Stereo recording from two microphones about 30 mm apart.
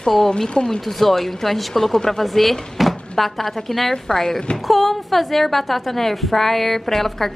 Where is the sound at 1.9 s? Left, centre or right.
Centre.